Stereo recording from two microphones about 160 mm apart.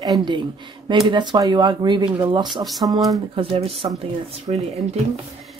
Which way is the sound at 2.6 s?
Centre (ahead or behind).